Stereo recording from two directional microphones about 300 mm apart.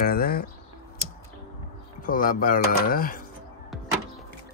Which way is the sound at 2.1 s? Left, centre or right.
Left.